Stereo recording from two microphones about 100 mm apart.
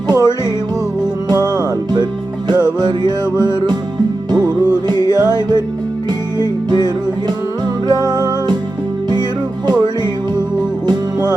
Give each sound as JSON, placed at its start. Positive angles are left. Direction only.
{"t": 0.1, "sound": "music", "side_deg": -35}
{"t": 10.8, "sound": "music", "side_deg": -40}